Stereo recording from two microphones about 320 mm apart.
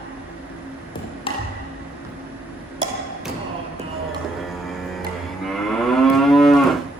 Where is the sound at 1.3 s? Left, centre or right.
Centre.